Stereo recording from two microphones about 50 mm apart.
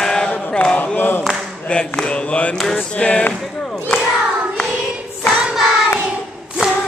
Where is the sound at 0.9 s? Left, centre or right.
Left.